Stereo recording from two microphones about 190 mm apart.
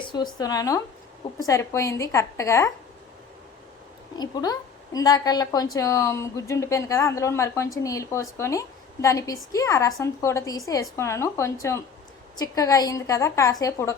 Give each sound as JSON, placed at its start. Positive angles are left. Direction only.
{"t": 0.0, "sound": "a woman's voice", "side_deg": 25}
{"t": 4.1, "sound": "a woman's voice", "side_deg": 20}